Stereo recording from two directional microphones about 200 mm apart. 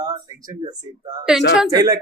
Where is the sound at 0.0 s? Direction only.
20° right (ahead or behind).